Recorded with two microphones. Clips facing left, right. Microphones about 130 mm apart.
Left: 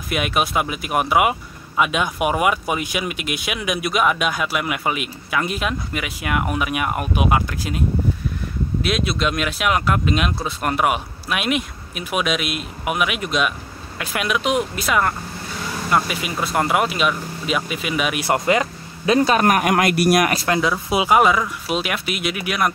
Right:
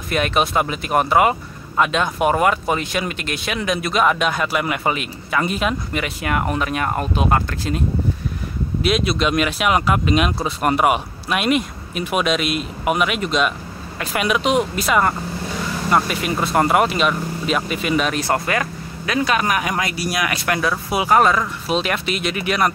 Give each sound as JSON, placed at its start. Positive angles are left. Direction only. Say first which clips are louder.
{"t": 0.1, "sound": "speech", "louder": "right 2 dB", "side_deg": 5}
{"t": 8.8, "sound": "speech", "louder": "right 4 dB", "side_deg": 0}
{"t": 19.1, "sound": "a man's voice", "louder": "left 2 dB", "side_deg": 35}
{"t": 19.4, "sound": "speech", "louder": "left 5 dB", "side_deg": 55}
{"t": 20.4, "sound": "speech", "louder": "left 1 dB", "side_deg": 20}